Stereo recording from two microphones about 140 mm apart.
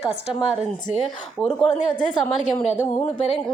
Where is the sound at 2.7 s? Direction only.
55° left (ahead or behind).